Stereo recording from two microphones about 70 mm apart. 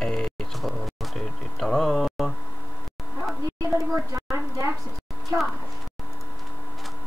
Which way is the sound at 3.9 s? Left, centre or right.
Right.